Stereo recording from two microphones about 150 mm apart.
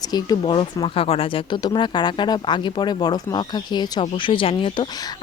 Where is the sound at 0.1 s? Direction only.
30° left (ahead or behind).